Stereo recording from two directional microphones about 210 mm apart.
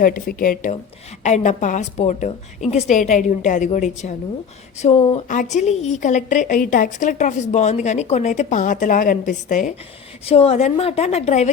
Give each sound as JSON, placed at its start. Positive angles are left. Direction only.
{"t": 0.0, "sound": "a woman's voice", "side_deg": 40}